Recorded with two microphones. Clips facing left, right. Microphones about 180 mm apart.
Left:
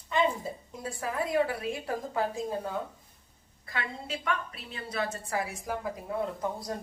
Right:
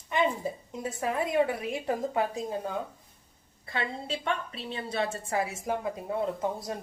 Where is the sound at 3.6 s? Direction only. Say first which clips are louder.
Right 3 dB; 30° right (ahead or behind).